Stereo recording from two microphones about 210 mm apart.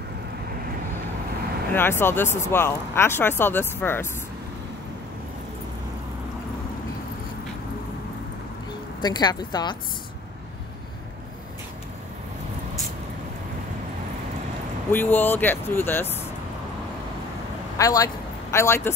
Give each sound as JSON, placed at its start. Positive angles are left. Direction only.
{"t": 1.7, "sound": "speech", "side_deg": 10}
{"t": 9.0, "sound": "speech", "side_deg": 20}
{"t": 14.9, "sound": "speech", "side_deg": 10}
{"t": 17.7, "sound": "speech", "side_deg": 15}